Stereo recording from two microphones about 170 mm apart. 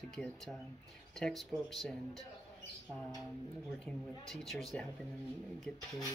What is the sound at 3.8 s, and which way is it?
Speech, centre (ahead or behind).